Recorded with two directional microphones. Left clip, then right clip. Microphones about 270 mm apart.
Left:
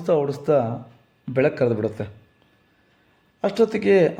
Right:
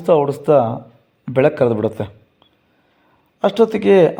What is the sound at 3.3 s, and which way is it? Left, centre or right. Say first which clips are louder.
Speech: right 5 dB; centre.